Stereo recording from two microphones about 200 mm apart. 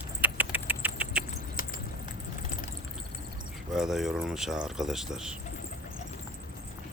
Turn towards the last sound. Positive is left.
turn(degrees=-5)  # may be behind; listen again after turning